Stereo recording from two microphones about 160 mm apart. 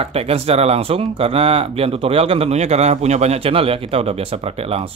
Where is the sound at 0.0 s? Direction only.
40° right (ahead or behind).